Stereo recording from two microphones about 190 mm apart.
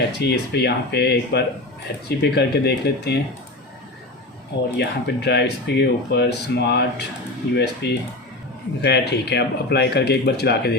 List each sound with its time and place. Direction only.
0.2 s speech: 60° left (ahead or behind)
4.8 s speech: 60° left (ahead or behind)